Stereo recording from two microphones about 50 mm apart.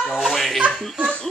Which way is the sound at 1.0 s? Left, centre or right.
Centre.